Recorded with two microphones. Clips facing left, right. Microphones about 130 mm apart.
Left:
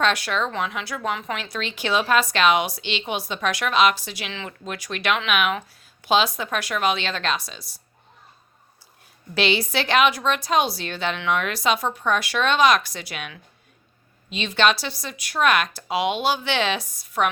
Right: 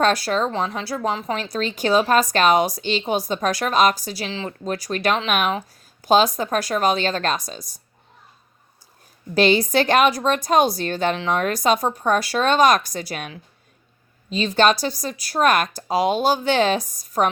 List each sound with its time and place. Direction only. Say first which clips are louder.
0.0 s a woman's voice: right 4 dB; 40° right (ahead or behind)
9.3 s a woman's voice: right 6 dB; 45° right (ahead or behind)